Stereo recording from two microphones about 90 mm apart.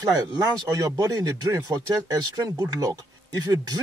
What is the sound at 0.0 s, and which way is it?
Speech, 40° right (ahead or behind).